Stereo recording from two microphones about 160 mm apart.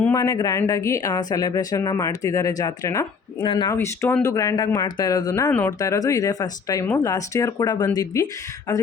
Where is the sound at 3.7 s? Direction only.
15° left (ahead or behind).